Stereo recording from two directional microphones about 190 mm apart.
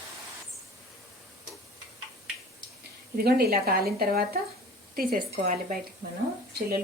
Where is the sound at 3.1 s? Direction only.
55° right (ahead or behind).